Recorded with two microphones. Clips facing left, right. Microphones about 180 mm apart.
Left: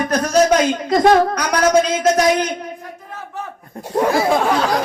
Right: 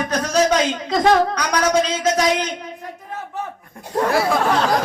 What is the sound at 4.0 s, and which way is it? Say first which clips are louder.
Speech: left 2 dB; 20° left (ahead or behind).